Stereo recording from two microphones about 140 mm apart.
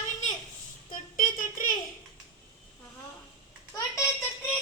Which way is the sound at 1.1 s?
75° left (ahead or behind).